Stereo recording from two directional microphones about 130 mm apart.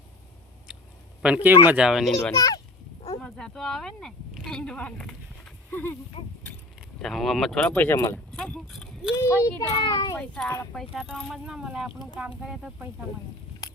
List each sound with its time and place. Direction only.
1.2 s speech: 10° right (ahead or behind)
2.3 s a child's voice: 25° left (ahead or behind)
3.2 s speech: 5° left (ahead or behind)
7.0 s speech: centre (ahead or behind)
9.2 s a child's voice: 25° left (ahead or behind)
10.2 s speech: 5° left (ahead or behind); by 12.9 s 10° right (ahead or behind)